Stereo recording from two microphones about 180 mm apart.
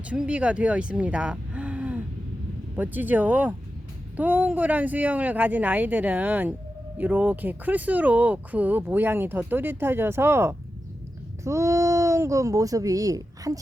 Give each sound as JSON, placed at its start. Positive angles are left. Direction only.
{"t": 0.1, "sound": "speech", "side_deg": -5}